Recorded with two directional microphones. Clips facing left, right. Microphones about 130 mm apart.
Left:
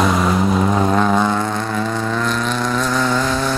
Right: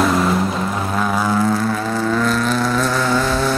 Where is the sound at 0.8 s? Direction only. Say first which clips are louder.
Left 5 dB; 20° left (ahead or behind).